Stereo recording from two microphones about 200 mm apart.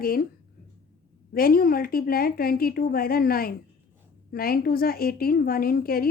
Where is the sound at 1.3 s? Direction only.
45° left (ahead or behind).